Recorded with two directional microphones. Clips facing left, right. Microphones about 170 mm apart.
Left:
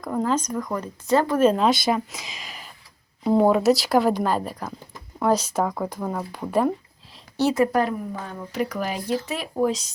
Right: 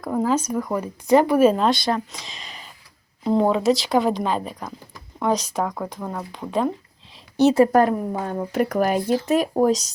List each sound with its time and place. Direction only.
0.0 s speech: 5° right (ahead or behind)
7.7 s speech: 50° right (ahead or behind)